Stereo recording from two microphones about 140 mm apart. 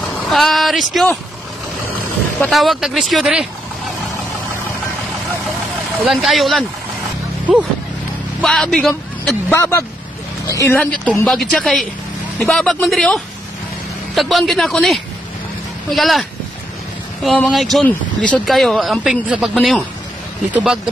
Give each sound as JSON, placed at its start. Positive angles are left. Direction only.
{"t": 0.3, "sound": "speech", "side_deg": 0}
{"t": 2.5, "sound": "speech", "side_deg": 0}
{"t": 6.0, "sound": "speech", "side_deg": 0}
{"t": 8.4, "sound": "speech", "side_deg": 5}
{"t": 9.5, "sound": "speech", "side_deg": 15}
{"t": 10.8, "sound": "speech", "side_deg": 10}
{"t": 17.4, "sound": "speech", "side_deg": 0}